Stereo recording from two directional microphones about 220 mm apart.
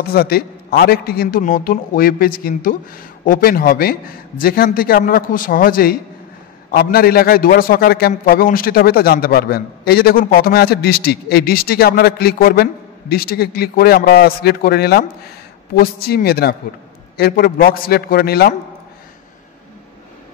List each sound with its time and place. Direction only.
0.1 s a man's voice: 45° left (ahead or behind)